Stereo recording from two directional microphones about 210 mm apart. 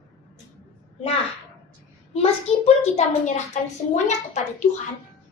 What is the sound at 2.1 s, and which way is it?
A child's voice, 30° left (ahead or behind).